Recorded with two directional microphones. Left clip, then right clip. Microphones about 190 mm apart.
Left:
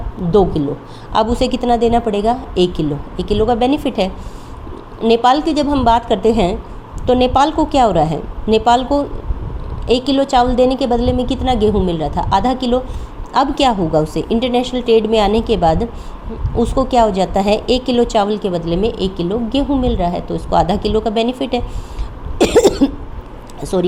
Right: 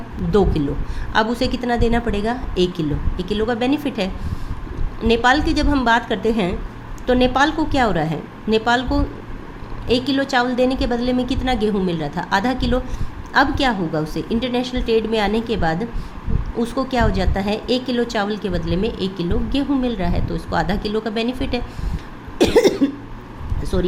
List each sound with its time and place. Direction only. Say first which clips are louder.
0.3 s speech: left 5 dB; centre (ahead or behind)
1.1 s a woman's voice: left 4 dB; 15° left (ahead or behind)
22.4 s cough: left 3 dB; 20° left (ahead or behind)